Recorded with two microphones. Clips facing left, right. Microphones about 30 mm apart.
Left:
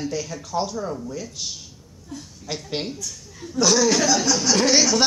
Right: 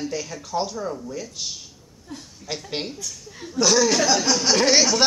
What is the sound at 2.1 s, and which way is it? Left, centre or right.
Speech, right.